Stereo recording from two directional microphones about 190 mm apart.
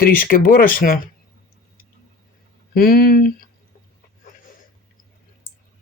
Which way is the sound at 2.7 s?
50° left (ahead or behind).